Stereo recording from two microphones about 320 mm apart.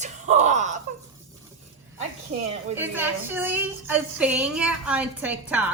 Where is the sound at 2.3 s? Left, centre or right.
Right.